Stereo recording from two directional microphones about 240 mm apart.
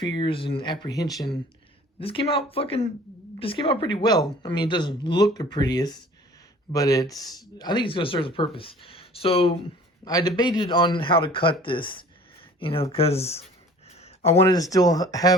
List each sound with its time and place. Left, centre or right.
0.0 s speech: centre